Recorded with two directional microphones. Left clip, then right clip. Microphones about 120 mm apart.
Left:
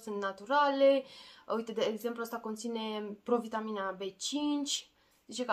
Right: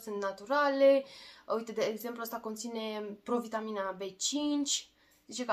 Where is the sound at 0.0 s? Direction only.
15° left (ahead or behind).